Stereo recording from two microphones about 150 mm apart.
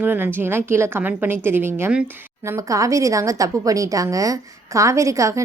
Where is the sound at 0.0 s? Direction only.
10° right (ahead or behind).